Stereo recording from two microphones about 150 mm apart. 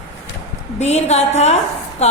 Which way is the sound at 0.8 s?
50° left (ahead or behind).